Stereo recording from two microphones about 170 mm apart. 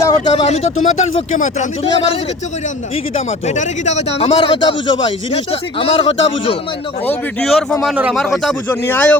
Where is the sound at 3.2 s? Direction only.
40° left (ahead or behind).